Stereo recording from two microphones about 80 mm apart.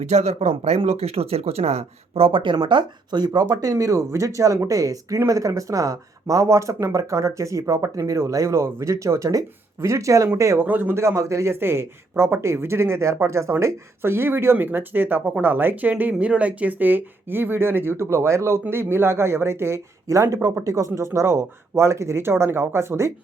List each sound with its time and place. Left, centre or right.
2.3 s speech: right
3.5 s speech: right
10.6 s speech: right